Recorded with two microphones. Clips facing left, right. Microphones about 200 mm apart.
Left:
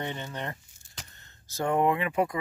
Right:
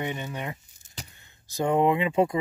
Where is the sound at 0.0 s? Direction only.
15° right (ahead or behind).